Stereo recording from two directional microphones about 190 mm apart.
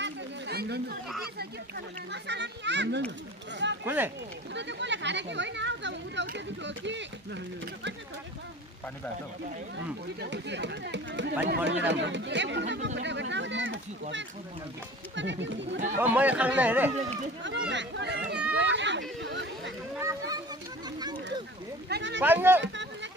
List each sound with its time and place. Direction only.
0.0 s chatter: 60° right (ahead or behind)
2.2 s speech: 65° right (ahead or behind)
3.8 s speech: 10° right (ahead or behind)
4.6 s speech: 70° right (ahead or behind)
10.2 s speech: 65° right (ahead or behind)
15.1 s speech: 70° right (ahead or behind)
16.0 s speech: 10° right (ahead or behind)
17.4 s speech: 70° right (ahead or behind)
18.5 s hubbub: 70° right (ahead or behind)
20.0 s children playing: 15° right (ahead or behind)
21.8 s speech: 65° right (ahead or behind)
22.2 s speech: 10° right (ahead or behind)